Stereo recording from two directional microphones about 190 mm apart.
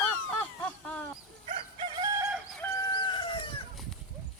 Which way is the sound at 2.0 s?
15° right (ahead or behind).